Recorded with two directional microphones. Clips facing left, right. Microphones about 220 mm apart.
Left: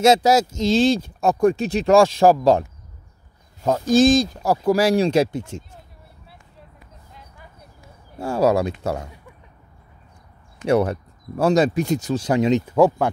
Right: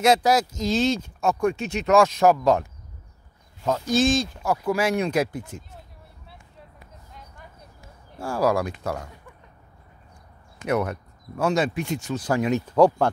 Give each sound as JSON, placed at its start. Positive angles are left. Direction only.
{"t": 0.0, "sound": "speech", "side_deg": 25}
{"t": 3.6, "sound": "speech", "side_deg": 45}
{"t": 8.2, "sound": "speech", "side_deg": 25}
{"t": 10.7, "sound": "speech", "side_deg": 30}
{"t": 12.3, "sound": "speech", "side_deg": 20}
{"t": 12.6, "sound": "speech", "side_deg": 5}